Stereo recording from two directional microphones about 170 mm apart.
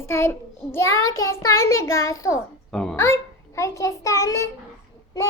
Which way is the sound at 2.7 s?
5° left (ahead or behind).